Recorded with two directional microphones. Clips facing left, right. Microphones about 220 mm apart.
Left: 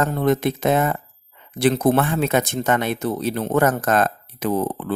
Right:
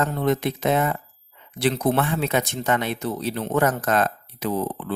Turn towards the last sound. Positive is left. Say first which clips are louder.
# left 3 dB
turn(degrees=50)  # may be behind; listen again after turning